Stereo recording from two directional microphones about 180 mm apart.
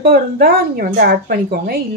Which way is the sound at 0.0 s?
55° right (ahead or behind).